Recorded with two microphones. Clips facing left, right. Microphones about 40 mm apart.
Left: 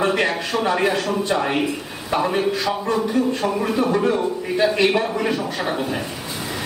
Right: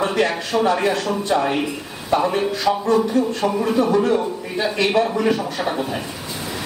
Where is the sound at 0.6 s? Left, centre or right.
Centre.